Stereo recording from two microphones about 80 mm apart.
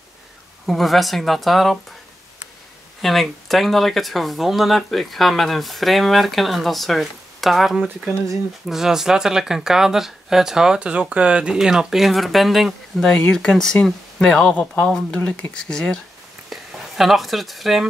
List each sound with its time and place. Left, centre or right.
0.7 s speech: centre
3.0 s speech: centre
16.4 s speech: centre